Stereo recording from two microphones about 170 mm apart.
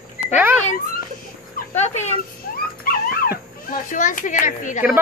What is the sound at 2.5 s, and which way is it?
Dog, 60° left (ahead or behind).